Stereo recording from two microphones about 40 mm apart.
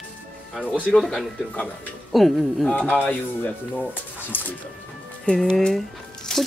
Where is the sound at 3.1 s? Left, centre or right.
Left.